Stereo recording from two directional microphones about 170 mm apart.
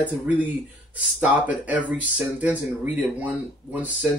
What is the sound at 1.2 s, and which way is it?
Speech, 10° right (ahead or behind).